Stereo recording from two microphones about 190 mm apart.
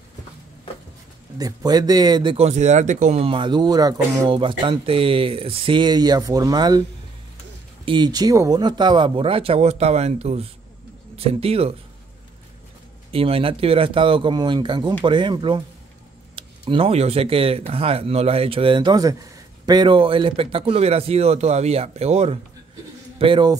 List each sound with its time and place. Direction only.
1.4 s speech: 20° right (ahead or behind)
7.8 s speech: 25° right (ahead or behind)
13.1 s speech: 30° right (ahead or behind)